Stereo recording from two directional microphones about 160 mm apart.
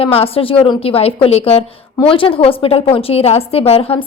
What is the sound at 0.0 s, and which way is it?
A woman's voice, 35° left (ahead or behind).